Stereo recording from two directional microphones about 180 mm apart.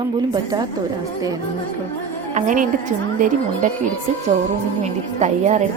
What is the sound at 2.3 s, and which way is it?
A woman's voice, 45° right (ahead or behind).